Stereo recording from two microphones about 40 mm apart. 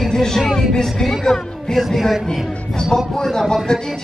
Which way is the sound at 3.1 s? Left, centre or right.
Centre.